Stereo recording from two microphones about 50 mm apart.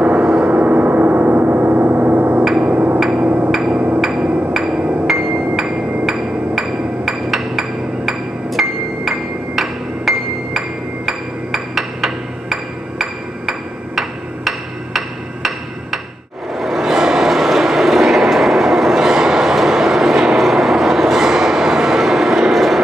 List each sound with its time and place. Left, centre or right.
0.2 s gong: centre
0.6 s gong: right
2.7 s a sound: right
3.0 s hammer: centre
3.3 s hammer: right
3.5 s a sound: centre
4.0 s hammer: centre
5.6 s a sound: centre
6.0 s hammer: centre
11.1 s music: centre
13.0 s hammer: centre
16.5 s train: centre